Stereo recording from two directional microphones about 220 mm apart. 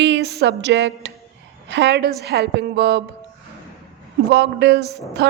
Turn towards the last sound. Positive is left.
turn(degrees=-50)  # may be behind; listen again after turning